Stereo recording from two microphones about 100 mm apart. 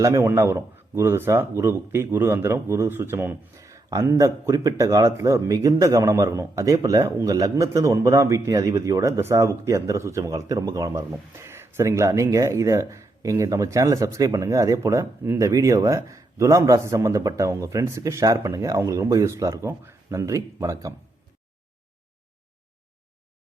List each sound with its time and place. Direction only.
0.0 s speech: 35° right (ahead or behind)
3.6 s speech: 35° right (ahead or behind)